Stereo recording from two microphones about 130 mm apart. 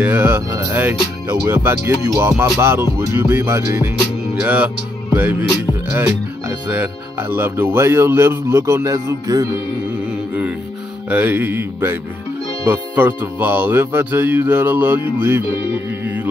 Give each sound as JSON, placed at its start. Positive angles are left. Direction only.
{"t": 0.0, "sound": "speech", "side_deg": -15}
{"t": 10.0, "sound": "mantra", "side_deg": -10}
{"t": 11.1, "sound": "speech", "side_deg": -15}
{"t": 15.9, "sound": "music", "side_deg": -15}